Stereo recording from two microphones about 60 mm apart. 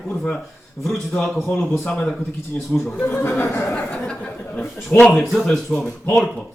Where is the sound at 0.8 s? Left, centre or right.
Centre.